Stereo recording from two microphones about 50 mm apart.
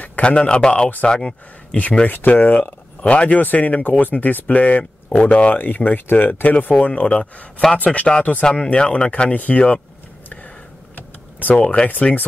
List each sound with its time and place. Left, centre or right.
0.2 s speech: left
2.0 s speech: left
11.4 s speech: left